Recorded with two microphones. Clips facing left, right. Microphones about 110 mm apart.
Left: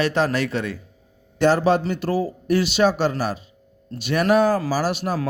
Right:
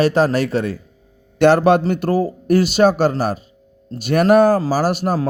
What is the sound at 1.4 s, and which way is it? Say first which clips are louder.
Speech: right 5 dB; 65° right (ahead or behind).